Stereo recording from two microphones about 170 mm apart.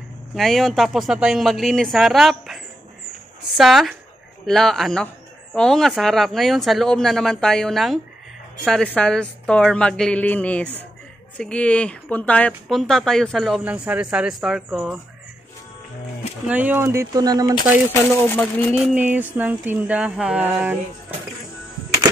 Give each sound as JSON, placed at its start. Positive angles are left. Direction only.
{"t": 0.3, "sound": "speech", "side_deg": 0}
{"t": 16.4, "sound": "speech", "side_deg": -10}
{"t": 17.8, "sound": "speech", "side_deg": 10}
{"t": 18.8, "sound": "speech", "side_deg": -10}